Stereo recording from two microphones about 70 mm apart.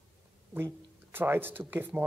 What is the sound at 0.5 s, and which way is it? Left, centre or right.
Speech, right.